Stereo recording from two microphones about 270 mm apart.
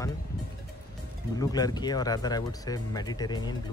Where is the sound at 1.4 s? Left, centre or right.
Centre.